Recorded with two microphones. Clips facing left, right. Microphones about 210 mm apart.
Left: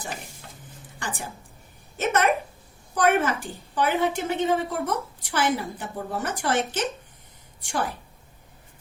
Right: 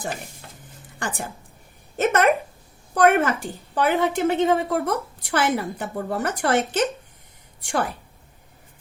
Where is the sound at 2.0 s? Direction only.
55° right (ahead or behind).